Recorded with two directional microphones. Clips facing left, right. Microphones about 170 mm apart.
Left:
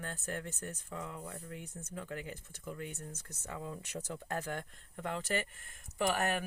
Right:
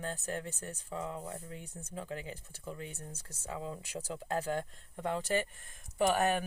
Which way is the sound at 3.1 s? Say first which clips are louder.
Right 3 dB; 15° right (ahead or behind).